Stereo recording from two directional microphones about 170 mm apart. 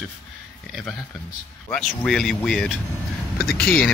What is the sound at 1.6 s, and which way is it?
Speech, 5° left (ahead or behind).